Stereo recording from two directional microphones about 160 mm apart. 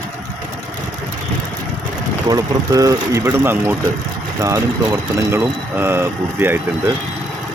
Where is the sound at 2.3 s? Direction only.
20° right (ahead or behind).